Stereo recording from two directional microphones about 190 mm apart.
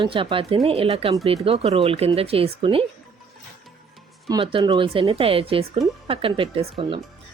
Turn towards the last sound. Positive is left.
turn(degrees=-30)  # may be behind; listen again after turning